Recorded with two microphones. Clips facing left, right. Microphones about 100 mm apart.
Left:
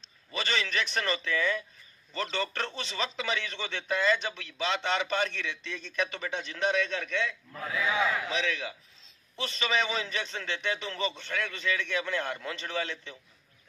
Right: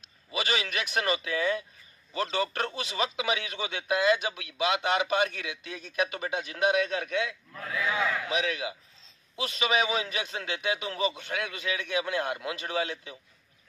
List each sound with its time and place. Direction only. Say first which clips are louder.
0.3 s speech: right 1 dB; 10° right (ahead or behind)
1.3 s speech: even; 35° right (ahead or behind)
2.3 s speech: right 3 dB; 10° right (ahead or behind)
7.5 s speech: even; 5° left (ahead or behind)
8.3 s speech: right 2 dB; 10° right (ahead or behind)